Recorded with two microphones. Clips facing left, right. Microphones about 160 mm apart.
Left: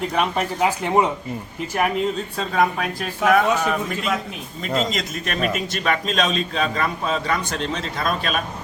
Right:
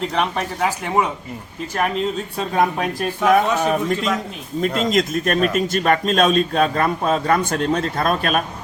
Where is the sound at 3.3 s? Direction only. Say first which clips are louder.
Right 1 dB; 25° right (ahead or behind).